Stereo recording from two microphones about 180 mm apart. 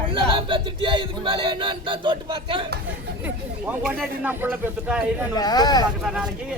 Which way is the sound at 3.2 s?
10° right (ahead or behind).